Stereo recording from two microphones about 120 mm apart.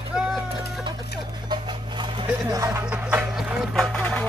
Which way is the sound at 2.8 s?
15° right (ahead or behind).